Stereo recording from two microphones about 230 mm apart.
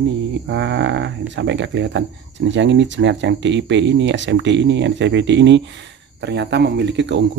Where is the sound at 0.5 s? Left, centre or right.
Right.